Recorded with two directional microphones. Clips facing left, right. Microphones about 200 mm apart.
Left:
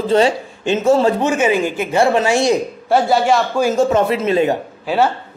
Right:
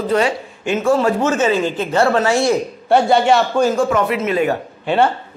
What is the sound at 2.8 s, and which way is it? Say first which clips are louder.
Speech: right 1 dB; centre (ahead or behind).